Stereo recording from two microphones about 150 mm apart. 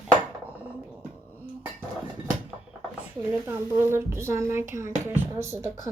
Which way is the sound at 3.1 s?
15° right (ahead or behind).